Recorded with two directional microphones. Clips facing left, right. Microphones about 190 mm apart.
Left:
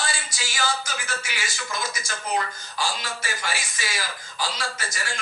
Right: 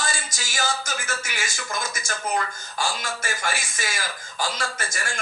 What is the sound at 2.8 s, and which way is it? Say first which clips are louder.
Speech: right 1 dB; 50° right (ahead or behind).